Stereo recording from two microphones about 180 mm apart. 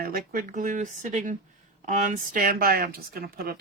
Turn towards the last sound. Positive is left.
turn(degrees=-60)  # may be behind; listen again after turning